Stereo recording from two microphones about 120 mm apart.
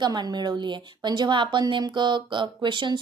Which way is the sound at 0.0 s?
35° right (ahead or behind).